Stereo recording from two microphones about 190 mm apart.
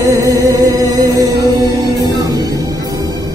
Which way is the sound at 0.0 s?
20° right (ahead or behind).